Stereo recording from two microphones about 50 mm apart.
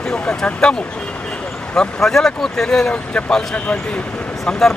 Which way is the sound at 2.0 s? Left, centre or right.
Centre.